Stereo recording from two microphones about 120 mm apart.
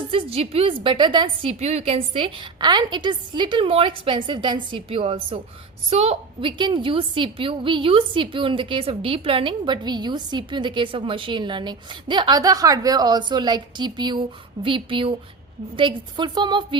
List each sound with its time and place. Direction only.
0.1 s a woman's voice: 50° right (ahead or behind)
1.5 s a woman's voice: 65° right (ahead or behind)
6.6 s a woman's voice: 40° right (ahead or behind)